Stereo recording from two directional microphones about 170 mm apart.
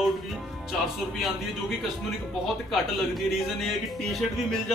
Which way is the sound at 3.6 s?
Centre (ahead or behind).